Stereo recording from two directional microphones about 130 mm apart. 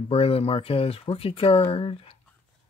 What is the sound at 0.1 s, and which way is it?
Speech, 50° left (ahead or behind).